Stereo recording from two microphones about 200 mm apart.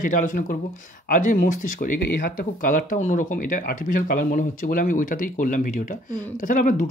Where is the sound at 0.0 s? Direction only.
40° left (ahead or behind).